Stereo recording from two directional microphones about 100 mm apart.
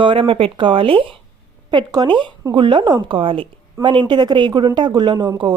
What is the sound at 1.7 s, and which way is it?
A woman's voice, 45° right (ahead or behind).